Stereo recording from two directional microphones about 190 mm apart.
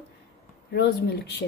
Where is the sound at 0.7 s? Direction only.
60° left (ahead or behind).